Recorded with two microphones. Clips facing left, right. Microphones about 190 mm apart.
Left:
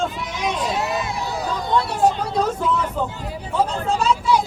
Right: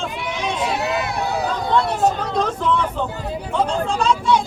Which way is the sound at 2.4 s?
10° left (ahead or behind).